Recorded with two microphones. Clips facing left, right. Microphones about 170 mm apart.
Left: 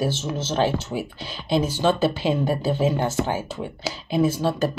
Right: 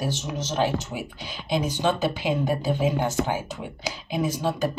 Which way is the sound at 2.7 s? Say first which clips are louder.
Left 2 dB; 15° right (ahead or behind).